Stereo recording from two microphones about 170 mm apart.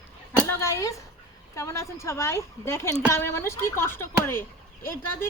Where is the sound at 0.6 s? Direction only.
15° left (ahead or behind).